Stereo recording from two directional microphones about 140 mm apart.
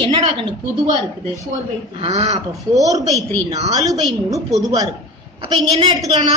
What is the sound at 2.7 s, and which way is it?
A woman's voice, 25° right (ahead or behind).